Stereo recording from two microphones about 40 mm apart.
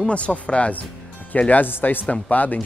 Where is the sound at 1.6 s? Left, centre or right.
Left.